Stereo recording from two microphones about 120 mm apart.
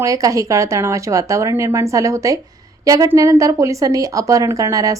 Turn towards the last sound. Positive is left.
turn(degrees=-30)  # may be behind; listen again after turning